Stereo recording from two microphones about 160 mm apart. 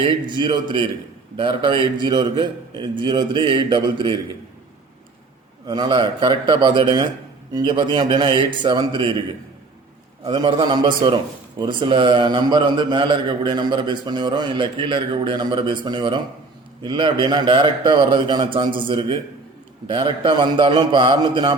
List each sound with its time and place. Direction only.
0.0 s a man's voice: 30° right (ahead or behind)
5.6 s a man's voice: 25° right (ahead or behind)
10.3 s a man's voice: 30° right (ahead or behind)